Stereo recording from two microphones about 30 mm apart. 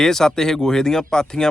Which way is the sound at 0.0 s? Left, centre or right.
Centre.